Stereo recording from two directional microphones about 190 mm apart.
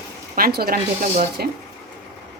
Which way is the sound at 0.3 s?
50° right (ahead or behind).